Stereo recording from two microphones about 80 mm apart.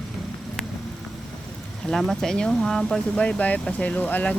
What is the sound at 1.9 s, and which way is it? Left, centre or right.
Speech, centre.